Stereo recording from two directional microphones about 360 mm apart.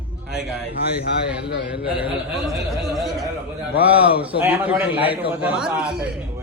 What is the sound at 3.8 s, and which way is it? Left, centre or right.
A man's voice, centre.